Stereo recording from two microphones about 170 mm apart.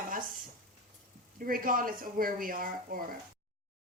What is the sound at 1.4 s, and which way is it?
A woman's voice, 55° right (ahead or behind).